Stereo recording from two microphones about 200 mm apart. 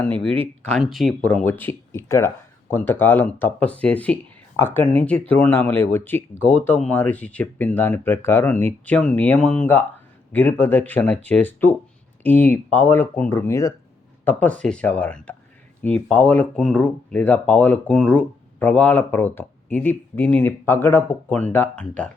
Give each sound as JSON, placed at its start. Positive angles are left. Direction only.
{"t": 0.0, "sound": "speech", "side_deg": 5}